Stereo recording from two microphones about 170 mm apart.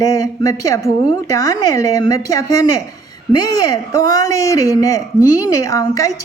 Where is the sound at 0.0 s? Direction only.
20° left (ahead or behind).